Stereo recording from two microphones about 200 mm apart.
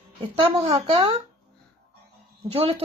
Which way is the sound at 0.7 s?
20° right (ahead or behind).